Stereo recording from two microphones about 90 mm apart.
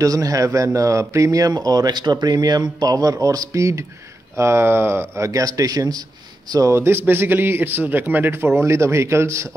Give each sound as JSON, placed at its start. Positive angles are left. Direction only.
{"t": 0.0, "sound": "a man's voice", "side_deg": -40}
{"t": 6.7, "sound": "a man's voice", "side_deg": -25}